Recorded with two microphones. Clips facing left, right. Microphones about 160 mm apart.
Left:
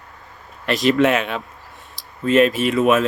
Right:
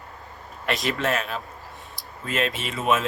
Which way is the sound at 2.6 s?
Centre (ahead or behind).